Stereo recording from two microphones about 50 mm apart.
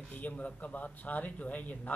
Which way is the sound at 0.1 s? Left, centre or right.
Left.